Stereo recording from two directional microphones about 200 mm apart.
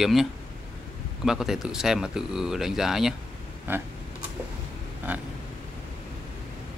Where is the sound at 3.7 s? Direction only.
10° right (ahead or behind).